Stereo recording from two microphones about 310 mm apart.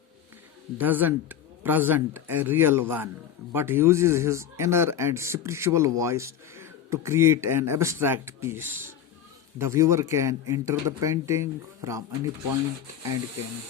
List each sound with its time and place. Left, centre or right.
0.8 s speech: centre